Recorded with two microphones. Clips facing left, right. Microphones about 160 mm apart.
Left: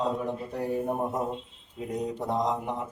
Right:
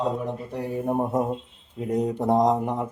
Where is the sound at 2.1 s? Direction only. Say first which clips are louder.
Right 9 dB; 50° right (ahead or behind).